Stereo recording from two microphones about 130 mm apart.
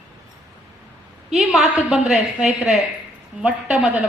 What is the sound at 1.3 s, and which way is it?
A woman's voice, centre (ahead or behind).